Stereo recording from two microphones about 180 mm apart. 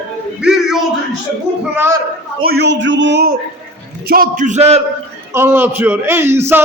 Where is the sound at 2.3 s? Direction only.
65° right (ahead or behind).